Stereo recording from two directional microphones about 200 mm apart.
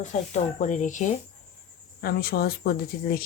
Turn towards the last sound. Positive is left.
turn(degrees=45)  # may be behind; listen again after turning